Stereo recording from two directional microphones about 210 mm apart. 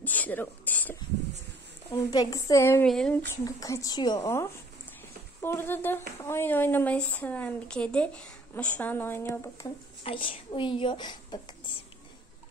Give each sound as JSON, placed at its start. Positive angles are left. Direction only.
{"t": 0.0, "sound": "a sound", "side_deg": 10}
{"t": 1.9, "sound": "speech", "side_deg": 20}
{"t": 3.4, "sound": "speech", "side_deg": 15}